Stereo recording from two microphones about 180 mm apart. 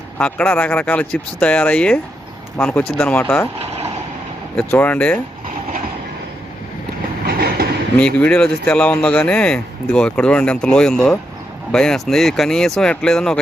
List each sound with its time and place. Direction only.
0.2 s speech: 10° left (ahead or behind)
4.7 s speech: 10° left (ahead or behind)
7.3 s train: 60° right (ahead or behind)
7.9 s speech: 5° left (ahead or behind)